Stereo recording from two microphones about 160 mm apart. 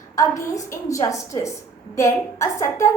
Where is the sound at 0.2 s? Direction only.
20° left (ahead or behind).